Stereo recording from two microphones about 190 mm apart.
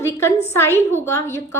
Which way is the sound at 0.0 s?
15° left (ahead or behind).